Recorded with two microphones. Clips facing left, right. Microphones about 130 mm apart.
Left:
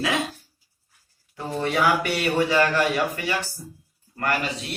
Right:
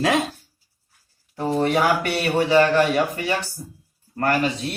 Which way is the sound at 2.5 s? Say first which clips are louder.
Right 4 dB; 30° right (ahead or behind).